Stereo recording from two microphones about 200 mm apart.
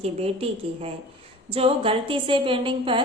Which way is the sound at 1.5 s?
30° right (ahead or behind).